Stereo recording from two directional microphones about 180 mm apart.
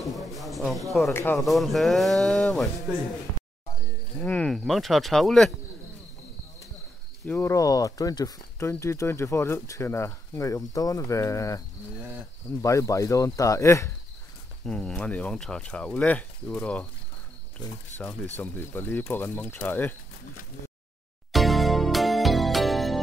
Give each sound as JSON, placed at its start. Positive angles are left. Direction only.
{"t": 0.0, "sound": "speech", "side_deg": 0}
{"t": 1.1, "sound": "speech", "side_deg": 10}
{"t": 1.4, "sound": "speech", "side_deg": 0}
{"t": 4.2, "sound": "speech", "side_deg": 10}
{"t": 7.2, "sound": "speech", "side_deg": 10}
{"t": 12.6, "sound": "speech", "side_deg": 15}
{"t": 14.7, "sound": "speech", "side_deg": 5}
{"t": 21.3, "sound": "music", "side_deg": 0}